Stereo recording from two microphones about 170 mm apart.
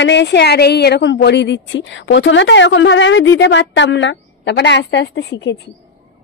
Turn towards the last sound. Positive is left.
turn(degrees=90)